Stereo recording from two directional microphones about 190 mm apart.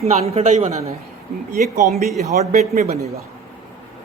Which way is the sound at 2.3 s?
40° right (ahead or behind).